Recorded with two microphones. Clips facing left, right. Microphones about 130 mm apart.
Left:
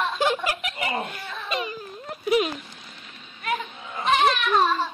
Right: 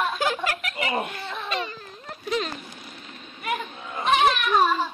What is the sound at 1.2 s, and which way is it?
Baby cry, 20° right (ahead or behind).